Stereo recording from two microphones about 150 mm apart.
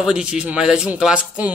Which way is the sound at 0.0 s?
5° right (ahead or behind).